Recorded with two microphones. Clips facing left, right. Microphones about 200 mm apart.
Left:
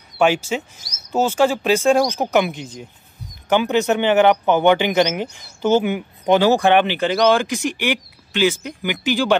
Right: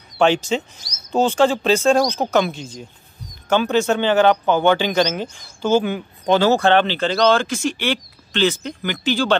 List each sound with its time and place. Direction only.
0.2 s speech: 10° left (ahead or behind)